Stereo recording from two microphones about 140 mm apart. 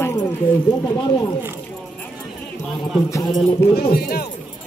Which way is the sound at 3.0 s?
20° left (ahead or behind).